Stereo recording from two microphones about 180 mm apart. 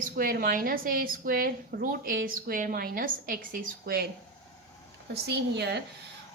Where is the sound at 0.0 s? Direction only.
50° right (ahead or behind).